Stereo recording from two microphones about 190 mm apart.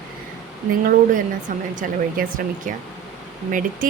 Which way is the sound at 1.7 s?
45° right (ahead or behind).